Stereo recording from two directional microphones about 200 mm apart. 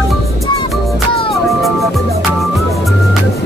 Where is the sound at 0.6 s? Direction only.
30° left (ahead or behind).